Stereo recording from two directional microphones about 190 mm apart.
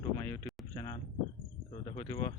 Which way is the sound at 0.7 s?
25° left (ahead or behind).